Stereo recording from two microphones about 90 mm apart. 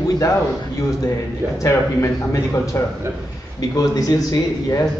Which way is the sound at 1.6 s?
35° left (ahead or behind).